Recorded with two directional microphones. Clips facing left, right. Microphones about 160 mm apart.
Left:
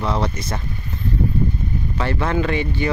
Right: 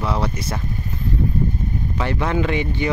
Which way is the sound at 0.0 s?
10° right (ahead or behind).